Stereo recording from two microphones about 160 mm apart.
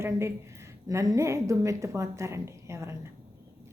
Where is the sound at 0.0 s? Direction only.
15° right (ahead or behind).